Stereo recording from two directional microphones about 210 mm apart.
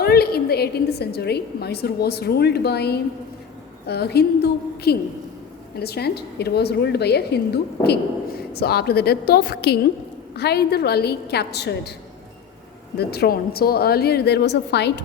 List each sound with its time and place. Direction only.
0.0 s a woman's voice: 50° left (ahead or behind)
13.0 s a woman's voice: 50° left (ahead or behind)